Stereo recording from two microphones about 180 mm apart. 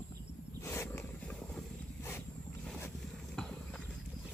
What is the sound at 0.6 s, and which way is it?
Boat, 10° left (ahead or behind).